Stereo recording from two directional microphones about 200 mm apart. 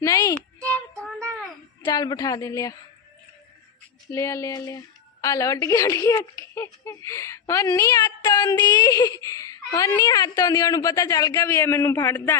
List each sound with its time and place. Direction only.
0.0 s a sound: 15° left (ahead or behind)
1.8 s a child's voice: 20° left (ahead or behind)
4.1 s a child's voice: 15° left (ahead or behind)